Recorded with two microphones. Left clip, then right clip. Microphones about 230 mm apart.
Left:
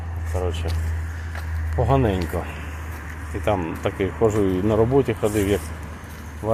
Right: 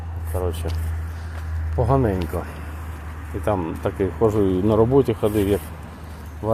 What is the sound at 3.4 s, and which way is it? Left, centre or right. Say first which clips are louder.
Speech: even; centre.